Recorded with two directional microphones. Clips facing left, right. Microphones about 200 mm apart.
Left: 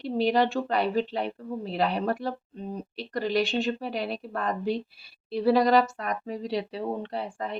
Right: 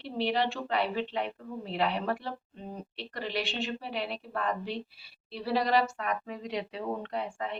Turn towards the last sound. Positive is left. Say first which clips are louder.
# left 2 dB
turn(degrees=35)  # may be behind; listen again after turning